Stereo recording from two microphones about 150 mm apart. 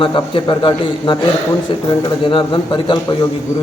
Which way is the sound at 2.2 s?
35° left (ahead or behind).